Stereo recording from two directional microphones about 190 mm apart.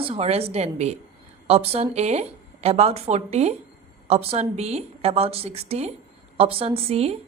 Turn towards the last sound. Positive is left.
turn(degrees=-30)  # may be behind; listen again after turning